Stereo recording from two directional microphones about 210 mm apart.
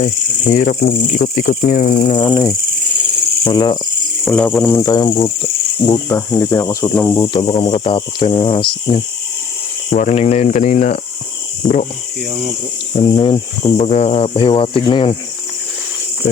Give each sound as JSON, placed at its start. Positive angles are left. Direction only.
{"t": 0.0, "sound": "cricket", "side_deg": 35}
{"t": 2.1, "sound": "speech", "side_deg": 20}
{"t": 4.3, "sound": "cricket", "side_deg": 5}
{"t": 6.9, "sound": "speech", "side_deg": 10}
{"t": 9.9, "sound": "cricket", "side_deg": 35}
{"t": 11.6, "sound": "speech", "side_deg": 5}
{"t": 13.0, "sound": "speech", "side_deg": 25}